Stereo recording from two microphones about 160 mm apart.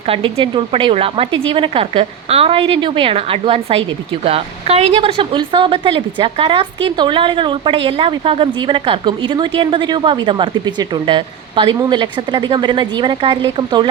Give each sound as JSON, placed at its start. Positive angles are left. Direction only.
{"t": 0.1, "sound": "a woman's voice", "side_deg": -35}